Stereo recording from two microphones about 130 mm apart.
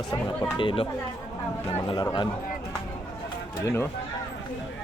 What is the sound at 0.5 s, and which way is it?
Speech, 40° left (ahead or behind).